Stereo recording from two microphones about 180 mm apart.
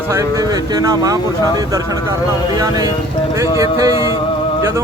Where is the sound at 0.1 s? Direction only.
20° right (ahead or behind).